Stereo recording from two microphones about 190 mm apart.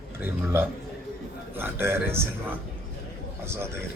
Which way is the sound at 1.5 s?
10° right (ahead or behind).